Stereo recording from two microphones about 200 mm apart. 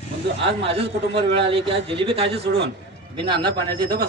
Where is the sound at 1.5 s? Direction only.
25° right (ahead or behind).